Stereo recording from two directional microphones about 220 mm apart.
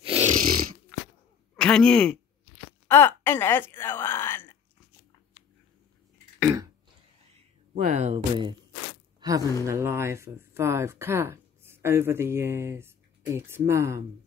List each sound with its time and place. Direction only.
0.0 s snoring: 30° right (ahead or behind)
1.6 s speech: 5° left (ahead or behind)
7.7 s speech: 30° right (ahead or behind); by 14.0 s 10° right (ahead or behind)